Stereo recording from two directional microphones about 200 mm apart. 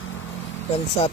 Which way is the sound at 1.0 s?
30° left (ahead or behind).